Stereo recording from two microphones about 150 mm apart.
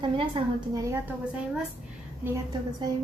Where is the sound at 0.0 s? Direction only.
30° right (ahead or behind).